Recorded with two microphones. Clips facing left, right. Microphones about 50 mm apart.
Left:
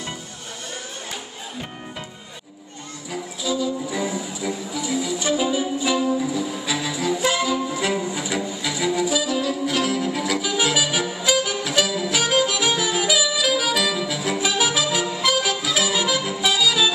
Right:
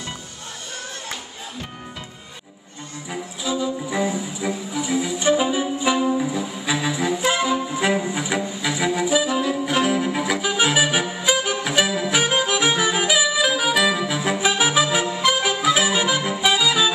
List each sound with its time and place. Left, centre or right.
3.1 s music: right